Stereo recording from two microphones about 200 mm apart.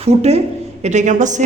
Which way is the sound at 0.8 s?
35° right (ahead or behind).